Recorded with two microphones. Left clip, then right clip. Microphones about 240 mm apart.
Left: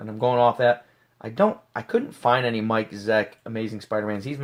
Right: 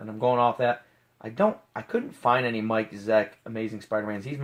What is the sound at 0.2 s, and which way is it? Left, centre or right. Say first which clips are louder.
Speech: left 3 dB; left.